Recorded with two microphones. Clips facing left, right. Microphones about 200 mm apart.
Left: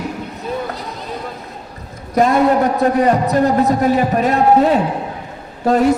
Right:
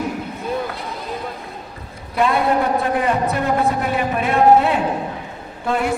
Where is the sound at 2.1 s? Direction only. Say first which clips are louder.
Left 5 dB; 40° left (ahead or behind).